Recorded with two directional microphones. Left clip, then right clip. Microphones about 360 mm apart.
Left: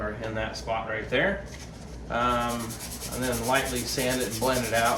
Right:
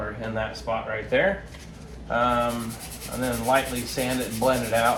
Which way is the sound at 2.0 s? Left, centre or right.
Centre.